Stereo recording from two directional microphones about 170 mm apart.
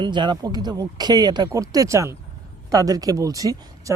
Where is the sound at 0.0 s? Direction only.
25° right (ahead or behind).